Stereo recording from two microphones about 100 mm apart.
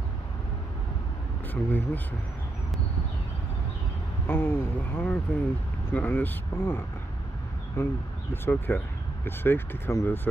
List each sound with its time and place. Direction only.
1.5 s speech: 20° left (ahead or behind)
4.3 s speech: 25° left (ahead or behind)